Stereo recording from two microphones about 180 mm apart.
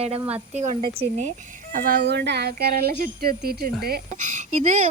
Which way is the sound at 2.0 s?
70° right (ahead or behind).